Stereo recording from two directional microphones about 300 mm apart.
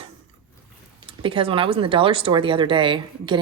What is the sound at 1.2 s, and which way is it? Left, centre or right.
A woman's voice, centre.